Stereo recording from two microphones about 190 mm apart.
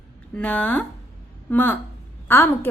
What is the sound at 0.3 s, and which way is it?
A woman's voice, 5° left (ahead or behind).